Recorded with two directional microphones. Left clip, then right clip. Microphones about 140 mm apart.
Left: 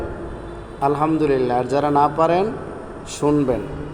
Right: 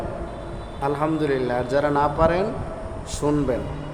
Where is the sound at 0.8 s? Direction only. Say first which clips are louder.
Left 5 dB; 15° left (ahead or behind).